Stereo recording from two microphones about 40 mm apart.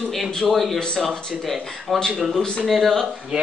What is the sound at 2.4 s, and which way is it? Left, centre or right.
Speech, centre.